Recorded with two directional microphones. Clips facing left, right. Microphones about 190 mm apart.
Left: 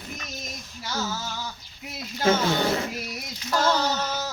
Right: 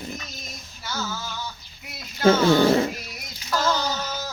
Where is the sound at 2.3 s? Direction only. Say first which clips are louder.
Right 6 dB; 30° right (ahead or behind).